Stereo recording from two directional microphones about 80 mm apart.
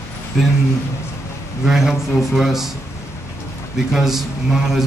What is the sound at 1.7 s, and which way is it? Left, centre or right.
Speech, centre.